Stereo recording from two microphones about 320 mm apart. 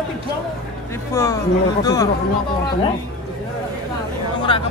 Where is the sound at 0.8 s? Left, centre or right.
Centre.